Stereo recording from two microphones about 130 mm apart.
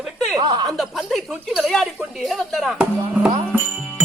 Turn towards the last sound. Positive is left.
turn(degrees=-10)  # may be behind; listen again after turning